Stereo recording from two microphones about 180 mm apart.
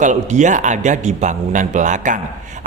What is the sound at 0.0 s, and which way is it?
Speech, 40° right (ahead or behind).